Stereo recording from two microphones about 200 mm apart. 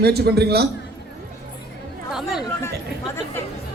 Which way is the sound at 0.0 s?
55° right (ahead or behind).